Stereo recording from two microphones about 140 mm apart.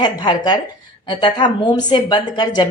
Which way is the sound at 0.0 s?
30° left (ahead or behind).